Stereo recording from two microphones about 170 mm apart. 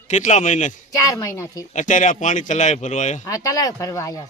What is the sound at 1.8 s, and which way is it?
Speech, 50° left (ahead or behind).